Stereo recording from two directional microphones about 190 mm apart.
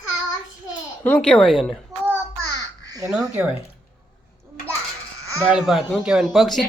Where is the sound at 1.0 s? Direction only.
5° left (ahead or behind).